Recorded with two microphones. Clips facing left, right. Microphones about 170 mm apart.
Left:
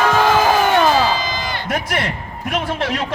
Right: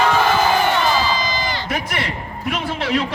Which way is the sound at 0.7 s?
60° left (ahead or behind).